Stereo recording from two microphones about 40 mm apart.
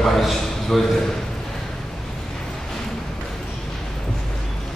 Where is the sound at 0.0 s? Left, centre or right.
Centre.